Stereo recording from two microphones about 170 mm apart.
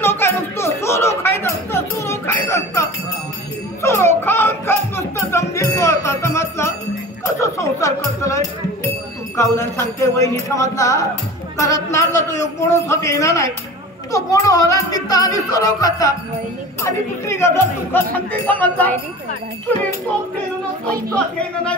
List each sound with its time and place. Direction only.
0.0 s a sound: 15° left (ahead or behind)
3.8 s music: 15° left (ahead or behind)
9.4 s speech: 15° left (ahead or behind)